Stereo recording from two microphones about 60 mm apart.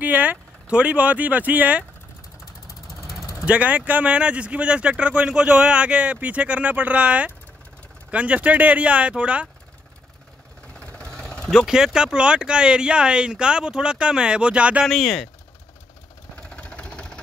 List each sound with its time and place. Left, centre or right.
0.0 s speech: right
3.4 s speech: right
10.8 s vehicle: left
11.6 s speech: centre
14.9 s speech: centre
16.3 s vehicle: left